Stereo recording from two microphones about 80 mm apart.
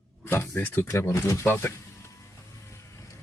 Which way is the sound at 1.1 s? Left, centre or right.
Left.